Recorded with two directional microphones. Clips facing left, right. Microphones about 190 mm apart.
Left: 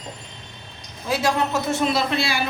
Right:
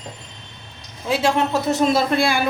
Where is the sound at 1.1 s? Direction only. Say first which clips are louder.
Right 3 dB; 25° right (ahead or behind).